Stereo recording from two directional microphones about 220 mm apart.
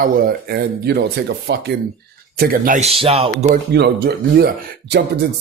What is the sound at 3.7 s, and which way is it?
Speech, 50° right (ahead or behind).